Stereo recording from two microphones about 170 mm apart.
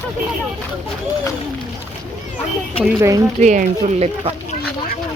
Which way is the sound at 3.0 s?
20° right (ahead or behind).